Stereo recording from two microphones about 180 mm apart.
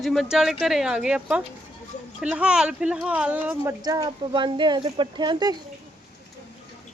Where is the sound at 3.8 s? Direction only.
20° right (ahead or behind).